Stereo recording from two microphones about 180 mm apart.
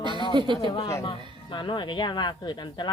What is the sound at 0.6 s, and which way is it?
Speech, 20° left (ahead or behind).